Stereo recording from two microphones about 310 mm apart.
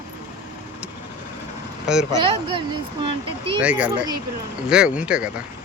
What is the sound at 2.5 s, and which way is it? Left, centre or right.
Speech, centre.